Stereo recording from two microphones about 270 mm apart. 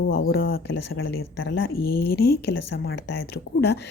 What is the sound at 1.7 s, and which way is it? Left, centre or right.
Speech, left.